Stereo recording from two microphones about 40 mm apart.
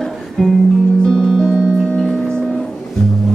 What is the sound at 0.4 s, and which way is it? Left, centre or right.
Music, centre.